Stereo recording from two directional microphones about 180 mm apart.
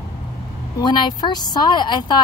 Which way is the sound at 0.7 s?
25° left (ahead or behind).